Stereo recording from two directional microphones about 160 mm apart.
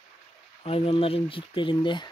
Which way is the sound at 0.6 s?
35° left (ahead or behind).